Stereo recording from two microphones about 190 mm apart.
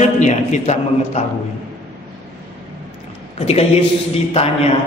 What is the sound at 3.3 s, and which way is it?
Speech, 30° left (ahead or behind).